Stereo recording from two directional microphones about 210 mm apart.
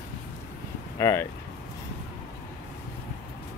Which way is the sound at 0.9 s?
15° left (ahead or behind).